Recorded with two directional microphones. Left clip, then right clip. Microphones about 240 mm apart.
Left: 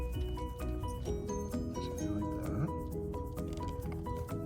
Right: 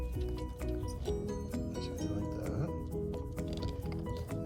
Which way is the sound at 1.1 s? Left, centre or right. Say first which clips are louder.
Right 1 dB; centre.